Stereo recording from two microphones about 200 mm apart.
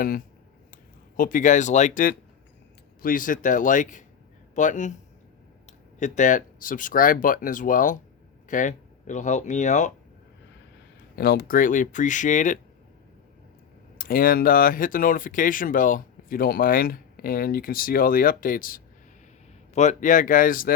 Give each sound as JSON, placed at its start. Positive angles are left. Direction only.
{"t": 1.1, "sound": "speech", "side_deg": 45}
{"t": 6.0, "sound": "speech", "side_deg": 40}
{"t": 11.2, "sound": "speech", "side_deg": 50}
{"t": 14.0, "sound": "speech", "side_deg": 45}